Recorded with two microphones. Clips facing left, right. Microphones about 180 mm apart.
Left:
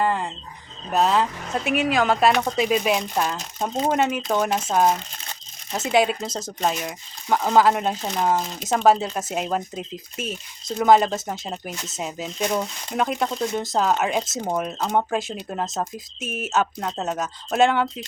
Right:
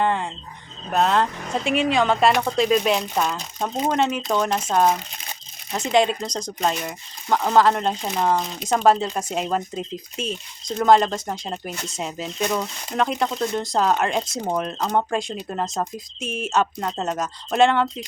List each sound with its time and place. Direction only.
0.0 s music: centre (ahead or behind)
0.9 s speech: centre (ahead or behind)